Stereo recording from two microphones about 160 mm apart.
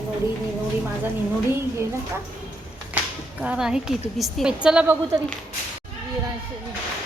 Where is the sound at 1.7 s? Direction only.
20° right (ahead or behind).